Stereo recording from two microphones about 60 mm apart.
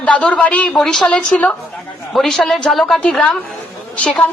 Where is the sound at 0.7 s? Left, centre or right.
Centre.